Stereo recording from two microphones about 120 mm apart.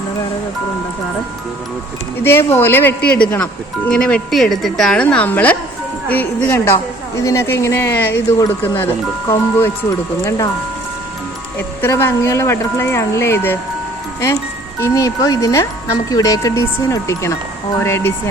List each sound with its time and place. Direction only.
2.2 s speech: 20° left (ahead or behind)
10.2 s speech: 30° left (ahead or behind)
11.8 s speech: 20° left (ahead or behind)
14.8 s speech: 25° left (ahead or behind)